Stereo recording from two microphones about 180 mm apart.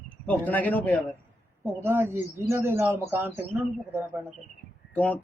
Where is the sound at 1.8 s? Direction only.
15° right (ahead or behind).